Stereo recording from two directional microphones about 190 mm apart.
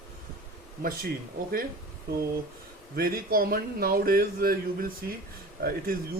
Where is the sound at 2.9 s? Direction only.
50° right (ahead or behind).